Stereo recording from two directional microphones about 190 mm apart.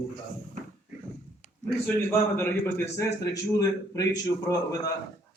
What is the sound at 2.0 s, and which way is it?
Speech, 10° left (ahead or behind).